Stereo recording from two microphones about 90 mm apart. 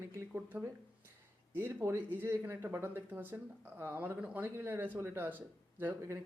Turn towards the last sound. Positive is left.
turn(degrees=-30)  # may be behind; listen again after turning